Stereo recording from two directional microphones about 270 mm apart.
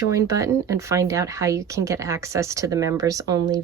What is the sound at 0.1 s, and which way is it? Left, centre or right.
Speech, centre.